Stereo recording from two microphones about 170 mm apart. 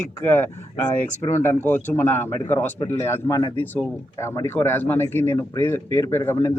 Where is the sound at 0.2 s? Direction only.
15° left (ahead or behind).